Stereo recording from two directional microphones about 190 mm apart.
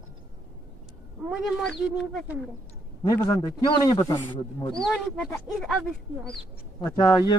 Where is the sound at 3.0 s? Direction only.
20° left (ahead or behind).